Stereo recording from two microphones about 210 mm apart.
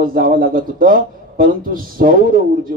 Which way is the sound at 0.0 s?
40° right (ahead or behind).